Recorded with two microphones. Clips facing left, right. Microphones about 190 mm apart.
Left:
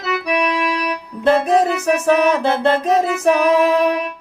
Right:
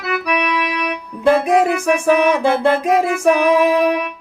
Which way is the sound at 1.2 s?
10° right (ahead or behind).